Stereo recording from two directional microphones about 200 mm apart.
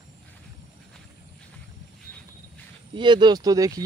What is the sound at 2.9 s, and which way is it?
Speech, 20° right (ahead or behind).